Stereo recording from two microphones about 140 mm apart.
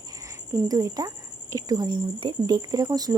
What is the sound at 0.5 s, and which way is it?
Speech, 25° right (ahead or behind).